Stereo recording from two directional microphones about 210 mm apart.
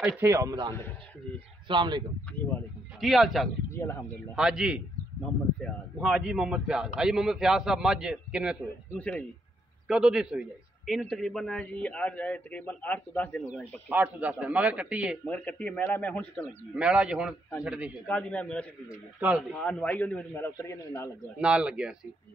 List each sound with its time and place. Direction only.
0.2 s a man's voice: 15° right (ahead or behind)
3.0 s a man's voice: centre (ahead or behind)
3.7 s a man's voice: 15° left (ahead or behind)
4.4 s a man's voice: 5° right (ahead or behind)
8.9 s a man's voice: 5° left (ahead or behind)
13.8 s a man's voice: 5° right (ahead or behind)
15.2 s a man's voice: 5° left (ahead or behind)
16.7 s a man's voice: 5° right (ahead or behind)
18.0 s a man's voice: 5° left (ahead or behind)
19.1 s a man's voice: 5° right (ahead or behind)
19.5 s a man's voice: 5° left (ahead or behind)
21.4 s a man's voice: 5° right (ahead or behind)